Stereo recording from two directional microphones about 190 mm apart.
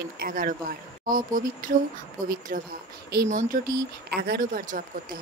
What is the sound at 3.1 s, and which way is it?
Speech, 50° right (ahead or behind).